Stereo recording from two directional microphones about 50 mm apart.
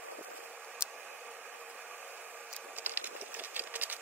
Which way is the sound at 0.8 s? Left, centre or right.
Right.